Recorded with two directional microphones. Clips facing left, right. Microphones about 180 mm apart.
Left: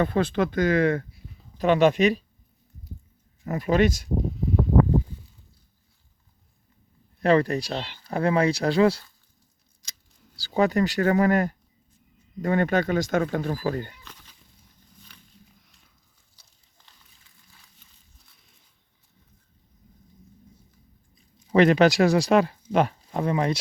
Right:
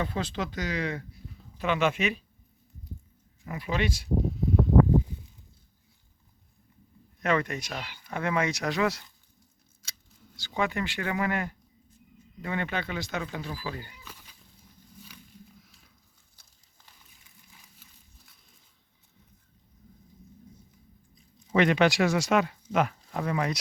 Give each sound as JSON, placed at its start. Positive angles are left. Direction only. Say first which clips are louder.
{"t": 0.0, "sound": "speech", "louder": "left 8 dB", "side_deg": 55}
{"t": 1.5, "sound": "speech", "louder": "left 8 dB", "side_deg": 40}
{"t": 3.4, "sound": "speech", "louder": "left 9 dB", "side_deg": 45}
{"t": 7.2, "sound": "speech", "louder": "left 7 dB", "side_deg": 35}
{"t": 10.3, "sound": "speech", "louder": "left 8 dB", "side_deg": 35}
{"t": 13.9, "sound": "a sound", "louder": "even", "side_deg": -10}
{"t": 15.6, "sound": "a sound", "louder": "right 2 dB", "side_deg": 0}
{"t": 21.5, "sound": "speech", "louder": "left 5 dB", "side_deg": 40}